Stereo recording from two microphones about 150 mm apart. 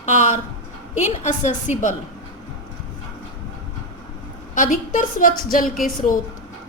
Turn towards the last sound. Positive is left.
turn(degrees=65)  # may be behind; listen again after turning